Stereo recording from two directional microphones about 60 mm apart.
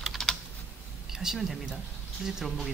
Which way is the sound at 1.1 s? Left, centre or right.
Centre.